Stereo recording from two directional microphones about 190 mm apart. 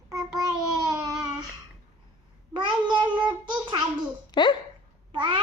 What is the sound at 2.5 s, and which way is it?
Babbling, 25° right (ahead or behind).